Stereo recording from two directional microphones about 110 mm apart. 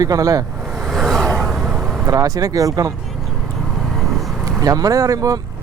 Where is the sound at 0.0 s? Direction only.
30° right (ahead or behind).